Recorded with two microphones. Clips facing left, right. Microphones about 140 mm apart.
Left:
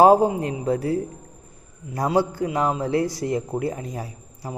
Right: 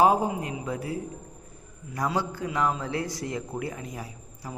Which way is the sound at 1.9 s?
30° left (ahead or behind).